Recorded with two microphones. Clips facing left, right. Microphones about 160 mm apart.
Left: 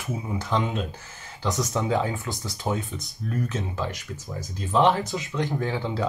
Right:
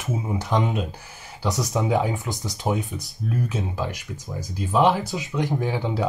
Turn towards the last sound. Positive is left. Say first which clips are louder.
# right 2 dB
turn(degrees=-15)  # may be behind; listen again after turning